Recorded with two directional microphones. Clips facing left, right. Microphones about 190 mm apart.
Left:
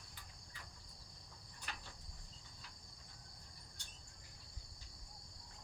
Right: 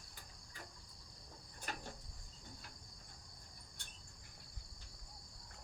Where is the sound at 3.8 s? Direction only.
55° right (ahead or behind).